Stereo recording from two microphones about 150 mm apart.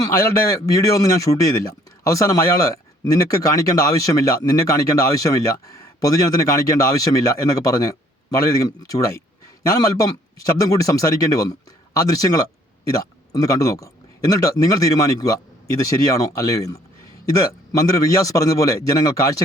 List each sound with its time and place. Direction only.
0.0 s speech: 20° left (ahead or behind)